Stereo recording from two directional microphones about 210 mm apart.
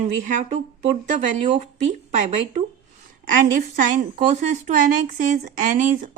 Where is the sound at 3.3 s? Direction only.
40° right (ahead or behind).